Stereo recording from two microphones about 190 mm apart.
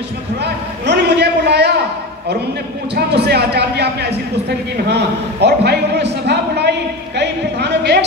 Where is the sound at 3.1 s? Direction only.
60° right (ahead or behind).